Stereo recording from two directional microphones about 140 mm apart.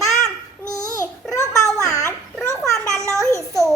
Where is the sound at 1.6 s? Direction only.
25° left (ahead or behind).